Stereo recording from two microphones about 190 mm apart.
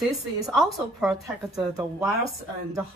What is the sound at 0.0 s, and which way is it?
A woman's voice, centre (ahead or behind).